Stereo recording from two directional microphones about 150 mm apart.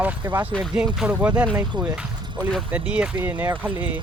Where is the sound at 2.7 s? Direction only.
10° right (ahead or behind).